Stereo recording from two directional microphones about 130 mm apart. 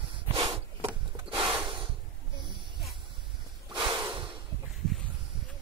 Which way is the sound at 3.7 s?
35° right (ahead or behind).